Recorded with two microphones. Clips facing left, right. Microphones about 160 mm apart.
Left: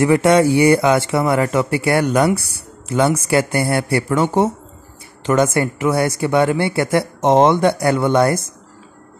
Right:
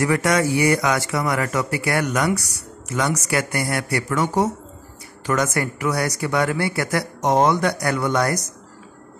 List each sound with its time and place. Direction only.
0.0 s speech: 25° left (ahead or behind)